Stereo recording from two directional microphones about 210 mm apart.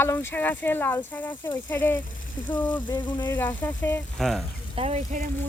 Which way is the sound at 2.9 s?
20° left (ahead or behind).